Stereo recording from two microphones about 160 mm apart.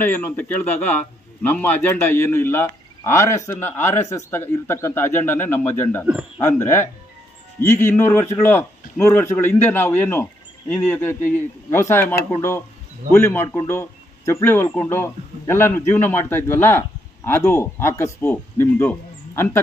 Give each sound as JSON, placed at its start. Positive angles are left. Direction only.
{"t": 0.0, "sound": "a man's voice", "side_deg": 10}